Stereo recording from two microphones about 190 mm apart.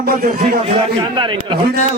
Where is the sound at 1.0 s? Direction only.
25° right (ahead or behind).